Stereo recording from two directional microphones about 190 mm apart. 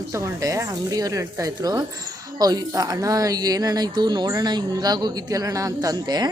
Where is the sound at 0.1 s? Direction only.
15° right (ahead or behind).